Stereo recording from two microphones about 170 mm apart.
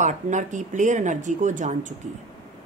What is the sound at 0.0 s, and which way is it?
A woman's voice, 45° right (ahead or behind).